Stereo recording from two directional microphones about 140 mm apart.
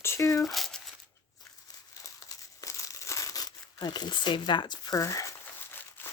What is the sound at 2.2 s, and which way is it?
Crumpling, 25° left (ahead or behind).